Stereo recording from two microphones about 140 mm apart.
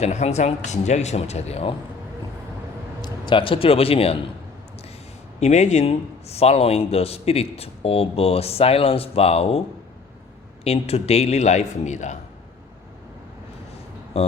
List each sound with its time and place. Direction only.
0.0 s speech: 50° left (ahead or behind)
3.0 s a man's voice: 35° left (ahead or behind)
5.4 s speech: 55° left (ahead or behind)